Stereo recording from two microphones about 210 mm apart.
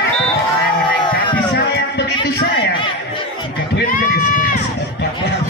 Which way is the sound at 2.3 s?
55° left (ahead or behind).